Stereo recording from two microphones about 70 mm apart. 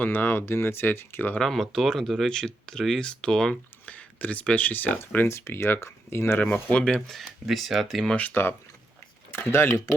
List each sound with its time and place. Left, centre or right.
0.0 s speech: left
1.4 s speech: centre
3.8 s speech: left
5.3 s speech: left
6.4 s speech: left
6.8 s speech: centre
8.1 s speech: left